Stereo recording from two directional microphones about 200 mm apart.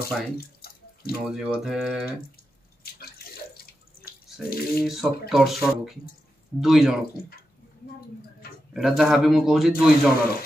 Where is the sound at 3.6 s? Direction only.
50° left (ahead or behind).